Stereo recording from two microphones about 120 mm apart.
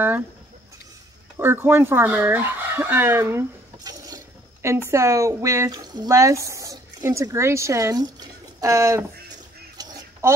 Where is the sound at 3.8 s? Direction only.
30° right (ahead or behind).